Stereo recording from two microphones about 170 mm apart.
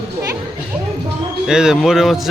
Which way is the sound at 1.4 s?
5° right (ahead or behind).